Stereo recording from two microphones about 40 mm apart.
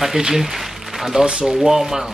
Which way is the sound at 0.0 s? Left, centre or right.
Centre.